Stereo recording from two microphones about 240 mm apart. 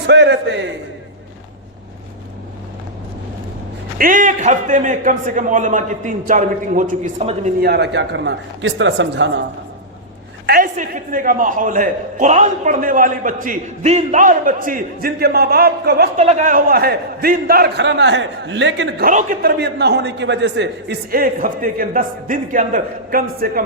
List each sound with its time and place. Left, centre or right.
0.1 s a man's voice: right
3.9 s a man's voice: right
7.6 s a man's voice: right
10.4 s a man's voice: right
16.1 s a man's voice: right